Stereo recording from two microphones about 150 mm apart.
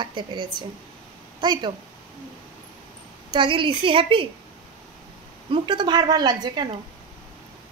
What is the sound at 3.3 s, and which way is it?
A woman's voice, 35° right (ahead or behind).